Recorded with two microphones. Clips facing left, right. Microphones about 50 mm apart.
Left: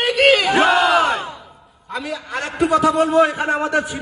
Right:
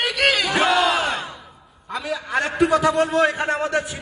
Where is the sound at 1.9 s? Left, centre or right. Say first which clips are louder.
Right 1 dB; centre.